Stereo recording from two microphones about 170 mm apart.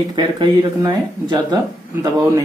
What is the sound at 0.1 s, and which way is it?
Speech, 25° right (ahead or behind).